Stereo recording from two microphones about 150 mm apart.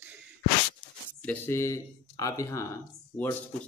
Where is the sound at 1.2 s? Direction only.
15° left (ahead or behind).